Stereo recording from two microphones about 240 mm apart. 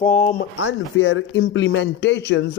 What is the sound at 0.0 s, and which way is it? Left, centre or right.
Speech, left.